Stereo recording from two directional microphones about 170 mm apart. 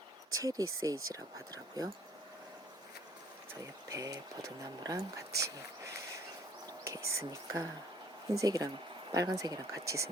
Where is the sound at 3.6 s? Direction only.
20° right (ahead or behind).